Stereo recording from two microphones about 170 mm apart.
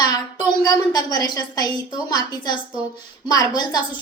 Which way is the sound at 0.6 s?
25° left (ahead or behind).